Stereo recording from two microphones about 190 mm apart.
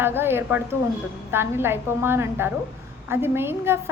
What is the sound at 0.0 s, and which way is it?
A woman's voice, 10° right (ahead or behind).